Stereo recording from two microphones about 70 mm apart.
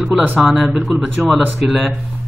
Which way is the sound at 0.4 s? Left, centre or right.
Centre.